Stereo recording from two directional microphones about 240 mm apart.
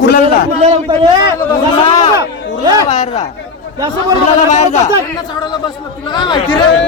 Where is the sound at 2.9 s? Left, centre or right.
Left.